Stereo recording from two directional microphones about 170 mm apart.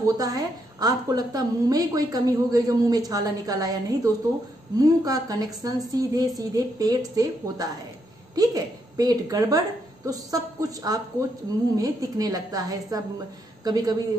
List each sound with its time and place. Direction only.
0.0 s a woman's voice: 20° right (ahead or behind)